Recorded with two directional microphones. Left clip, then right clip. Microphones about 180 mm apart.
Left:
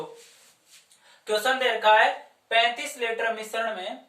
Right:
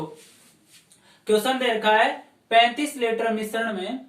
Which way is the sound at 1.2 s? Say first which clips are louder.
Right 2 dB; 15° left (ahead or behind).